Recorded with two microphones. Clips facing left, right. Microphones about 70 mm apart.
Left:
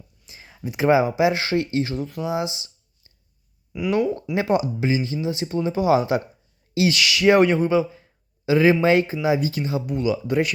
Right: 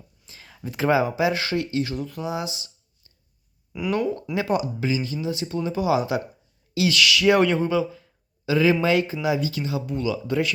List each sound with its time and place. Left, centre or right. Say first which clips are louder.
0.3 s speech: left 3 dB; centre
3.7 s speech: left 2 dB; centre
4.4 s speech: left 3 dB; left